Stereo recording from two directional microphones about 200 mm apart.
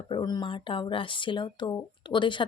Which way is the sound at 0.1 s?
20° left (ahead or behind).